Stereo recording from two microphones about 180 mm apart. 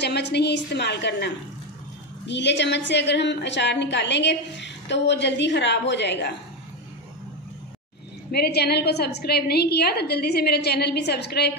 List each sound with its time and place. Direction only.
0.0 s a woman's voice: 70° left (ahead or behind)
8.3 s a woman's voice: 65° left (ahead or behind)